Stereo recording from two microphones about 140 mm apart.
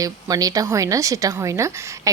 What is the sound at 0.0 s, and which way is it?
A woman's voice, 25° right (ahead or behind).